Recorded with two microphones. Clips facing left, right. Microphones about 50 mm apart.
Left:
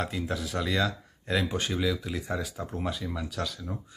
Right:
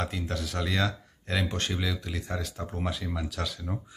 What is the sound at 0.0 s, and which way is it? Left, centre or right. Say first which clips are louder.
Speech: left 1 dB; centre.